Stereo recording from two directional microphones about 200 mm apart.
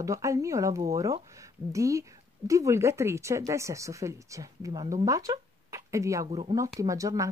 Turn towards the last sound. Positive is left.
turn(degrees=-15)  # may be behind; listen again after turning